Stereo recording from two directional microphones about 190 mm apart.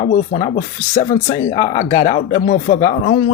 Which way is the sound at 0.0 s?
40° left (ahead or behind).